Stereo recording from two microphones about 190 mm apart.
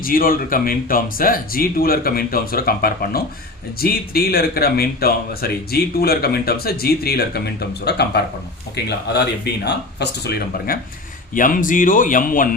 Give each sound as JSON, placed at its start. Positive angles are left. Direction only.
{"t": 0.0, "sound": "speech", "side_deg": 50}
{"t": 11.3, "sound": "speech", "side_deg": 45}